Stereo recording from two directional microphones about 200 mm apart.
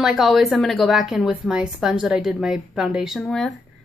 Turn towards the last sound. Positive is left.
turn(degrees=5)  # may be behind; listen again after turning